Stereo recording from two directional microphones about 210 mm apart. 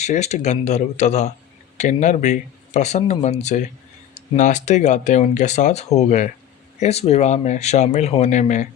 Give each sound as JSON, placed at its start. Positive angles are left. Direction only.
{"t": 0.0, "sound": "speech", "side_deg": 35}